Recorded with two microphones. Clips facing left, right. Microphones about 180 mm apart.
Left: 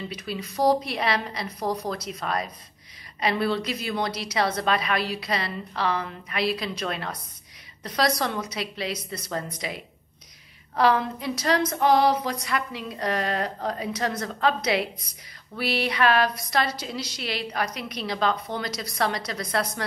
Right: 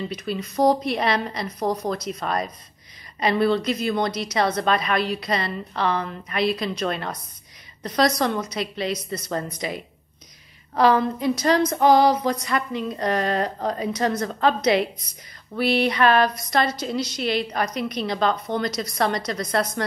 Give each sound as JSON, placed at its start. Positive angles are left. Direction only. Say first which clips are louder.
{"t": 0.1, "sound": "a woman's voice", "louder": "right 5 dB", "side_deg": 0}
{"t": 1.6, "sound": "speech", "louder": "right 3 dB", "side_deg": -20}
{"t": 2.0, "sound": "a woman's voice", "louder": "right 3 dB", "side_deg": 0}
{"t": 10.8, "sound": "a woman's voice", "louder": "right 4 dB", "side_deg": 0}
{"t": 16.6, "sound": "a woman's voice", "louder": "right 5 dB", "side_deg": -50}
{"t": 16.9, "sound": "a woman's voice", "louder": "right 8 dB", "side_deg": 5}